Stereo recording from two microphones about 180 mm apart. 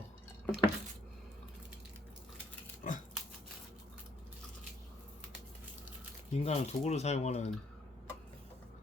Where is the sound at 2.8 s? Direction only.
45° left (ahead or behind).